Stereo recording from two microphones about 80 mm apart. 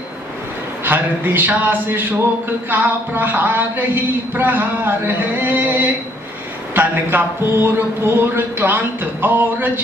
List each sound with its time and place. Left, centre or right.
0.8 s speech: right